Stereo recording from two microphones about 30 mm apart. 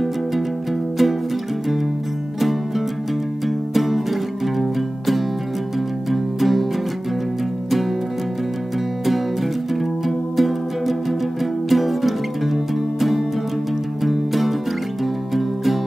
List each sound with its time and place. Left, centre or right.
3.4 s music: centre
9.0 s music: centre
14.0 s music: centre